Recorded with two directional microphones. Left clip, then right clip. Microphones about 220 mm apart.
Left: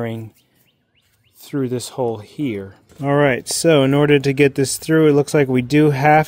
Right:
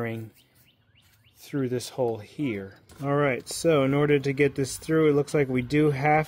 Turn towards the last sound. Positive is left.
turn(degrees=40)  # may be behind; listen again after turning